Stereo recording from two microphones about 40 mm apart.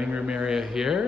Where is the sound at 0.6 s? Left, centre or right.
Centre.